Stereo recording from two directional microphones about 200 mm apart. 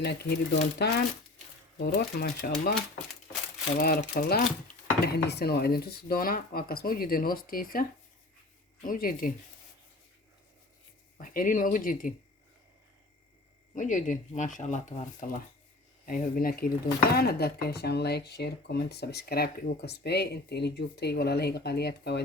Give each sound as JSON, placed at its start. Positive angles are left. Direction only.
{"t": 0.0, "sound": "speech", "side_deg": 55}
{"t": 3.8, "sound": "speech", "side_deg": 50}
{"t": 11.2, "sound": "speech", "side_deg": 45}
{"t": 13.7, "sound": "speech", "side_deg": 40}